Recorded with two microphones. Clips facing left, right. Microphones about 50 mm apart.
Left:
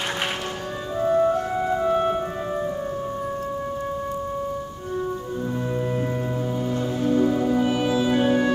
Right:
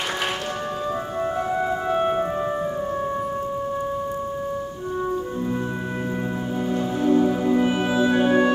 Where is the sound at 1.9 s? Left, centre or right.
Right.